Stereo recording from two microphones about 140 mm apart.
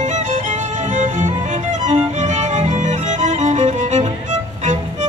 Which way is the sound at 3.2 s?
60° right (ahead or behind).